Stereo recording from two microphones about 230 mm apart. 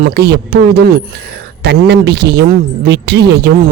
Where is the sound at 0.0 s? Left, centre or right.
Right.